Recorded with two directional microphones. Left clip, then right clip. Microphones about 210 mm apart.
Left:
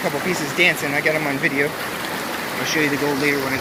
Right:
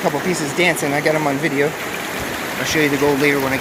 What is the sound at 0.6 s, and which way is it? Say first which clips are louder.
Speech: right 1 dB; 25° right (ahead or behind).